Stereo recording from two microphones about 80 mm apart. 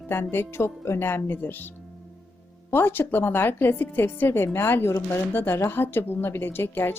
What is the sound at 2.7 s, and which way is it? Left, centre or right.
A woman's voice, left.